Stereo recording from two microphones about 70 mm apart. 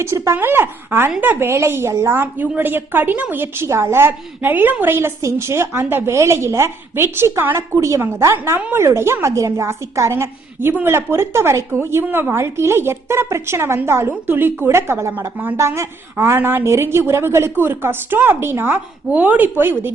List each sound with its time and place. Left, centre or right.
0.0 s a woman's voice: right
0.3 s a woman's voice: right